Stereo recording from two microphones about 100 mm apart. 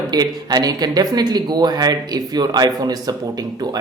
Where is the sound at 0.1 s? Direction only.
40° right (ahead or behind).